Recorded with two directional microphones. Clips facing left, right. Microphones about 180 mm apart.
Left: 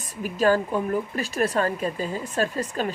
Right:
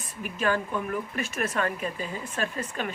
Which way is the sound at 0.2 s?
35° left (ahead or behind).